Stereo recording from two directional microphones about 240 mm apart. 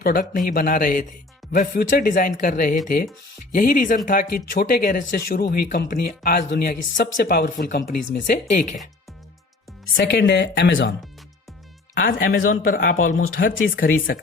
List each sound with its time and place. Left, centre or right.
0.0 s speech: left
1.4 s music: centre
1.9 s speech: left
10.0 s speech: left
11.9 s speech: left